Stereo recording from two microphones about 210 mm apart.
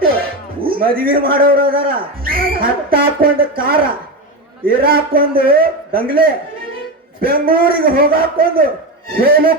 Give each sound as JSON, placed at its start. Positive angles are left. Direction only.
{"t": 0.8, "sound": "a man's voice", "side_deg": -45}